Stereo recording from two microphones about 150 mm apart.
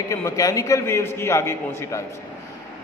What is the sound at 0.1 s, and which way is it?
A man's voice, 20° left (ahead or behind).